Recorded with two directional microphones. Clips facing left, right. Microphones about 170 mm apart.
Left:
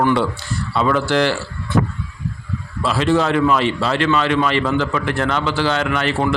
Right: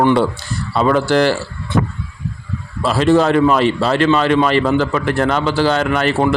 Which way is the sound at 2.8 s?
40° right (ahead or behind).